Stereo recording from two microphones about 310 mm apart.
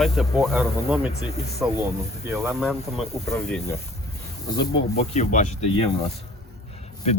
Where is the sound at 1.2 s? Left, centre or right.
Centre.